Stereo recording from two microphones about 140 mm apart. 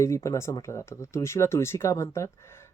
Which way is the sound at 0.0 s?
20° left (ahead or behind).